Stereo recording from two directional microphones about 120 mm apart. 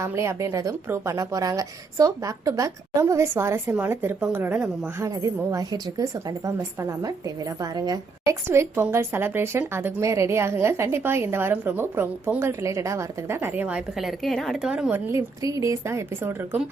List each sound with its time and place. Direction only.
0.0 s a woman's voice: 25° right (ahead or behind)
5.0 s a woman's voice: 30° right (ahead or behind)
8.4 s a woman's voice: 20° right (ahead or behind)
15.1 s a woman's voice: 30° right (ahead or behind)